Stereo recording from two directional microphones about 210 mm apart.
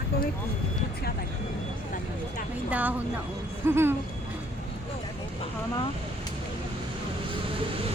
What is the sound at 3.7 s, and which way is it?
Speech, 10° right (ahead or behind).